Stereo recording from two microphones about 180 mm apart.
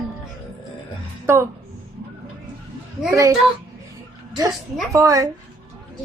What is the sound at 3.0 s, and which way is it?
Speech, 15° right (ahead or behind).